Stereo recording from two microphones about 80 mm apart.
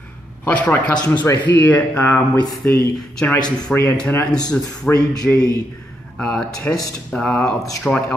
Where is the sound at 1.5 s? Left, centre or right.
Left.